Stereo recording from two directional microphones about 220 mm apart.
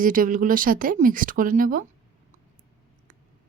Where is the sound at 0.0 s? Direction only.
40° right (ahead or behind).